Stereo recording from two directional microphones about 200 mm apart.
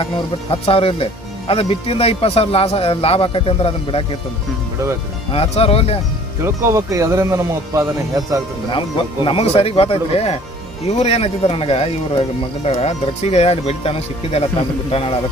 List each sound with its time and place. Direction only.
0.5 s speech: 30° left (ahead or behind)
5.3 s speech: 30° left (ahead or behind)
6.4 s speech: 15° right (ahead or behind)
9.2 s speech: 30° left (ahead or behind)